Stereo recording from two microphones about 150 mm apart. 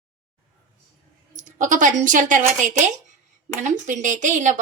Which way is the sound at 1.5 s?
60° right (ahead or behind).